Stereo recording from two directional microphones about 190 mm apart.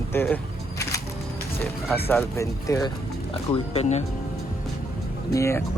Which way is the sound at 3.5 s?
35° left (ahead or behind).